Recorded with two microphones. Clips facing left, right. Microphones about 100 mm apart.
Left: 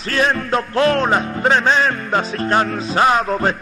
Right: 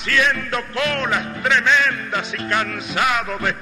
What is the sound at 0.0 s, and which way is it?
Music, 35° left (ahead or behind).